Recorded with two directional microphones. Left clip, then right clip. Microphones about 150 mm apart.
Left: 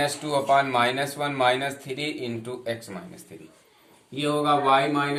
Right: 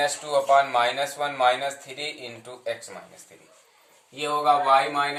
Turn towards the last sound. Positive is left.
turn(degrees=-5)  # may be behind; listen again after turning